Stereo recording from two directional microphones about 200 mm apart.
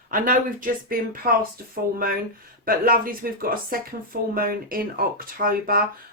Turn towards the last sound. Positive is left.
turn(degrees=-45)  # may be behind; listen again after turning